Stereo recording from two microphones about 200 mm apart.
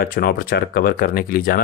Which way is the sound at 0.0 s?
50° left (ahead or behind).